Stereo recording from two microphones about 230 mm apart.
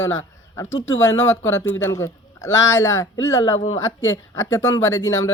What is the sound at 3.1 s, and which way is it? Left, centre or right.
Speech, left.